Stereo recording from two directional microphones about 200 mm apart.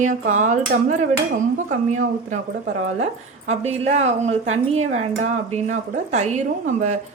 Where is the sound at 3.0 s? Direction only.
35° right (ahead or behind).